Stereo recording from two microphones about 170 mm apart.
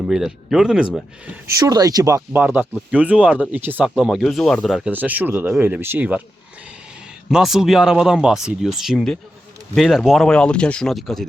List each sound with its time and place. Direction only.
0.1 s speech: 5° right (ahead or behind)
1.3 s speech: 20° right (ahead or behind)
7.3 s speech: centre (ahead or behind)